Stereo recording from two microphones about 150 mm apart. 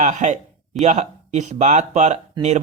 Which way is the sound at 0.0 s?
55° right (ahead or behind).